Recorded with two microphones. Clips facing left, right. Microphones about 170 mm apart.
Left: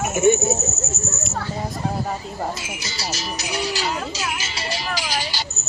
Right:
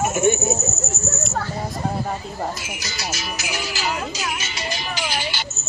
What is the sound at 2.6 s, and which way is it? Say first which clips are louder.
Speech: even; 25° left (ahead or behind).